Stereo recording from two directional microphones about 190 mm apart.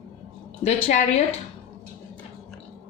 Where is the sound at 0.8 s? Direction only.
35° left (ahead or behind).